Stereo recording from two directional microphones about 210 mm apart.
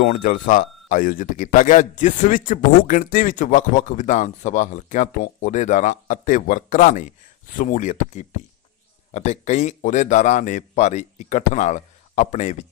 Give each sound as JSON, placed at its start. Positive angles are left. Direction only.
{"t": 0.0, "sound": "speech", "side_deg": 40}